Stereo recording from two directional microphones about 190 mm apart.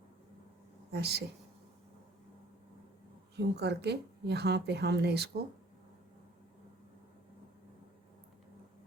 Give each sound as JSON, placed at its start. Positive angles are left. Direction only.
{"t": 0.9, "sound": "a woman's voice", "side_deg": -55}
{"t": 3.3, "sound": "speech", "side_deg": -60}